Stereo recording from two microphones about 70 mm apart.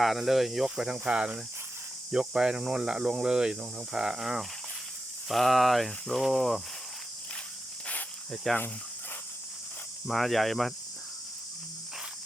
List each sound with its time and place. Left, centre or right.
0.0 s speech: centre
8.5 s speech: centre
10.1 s speech: centre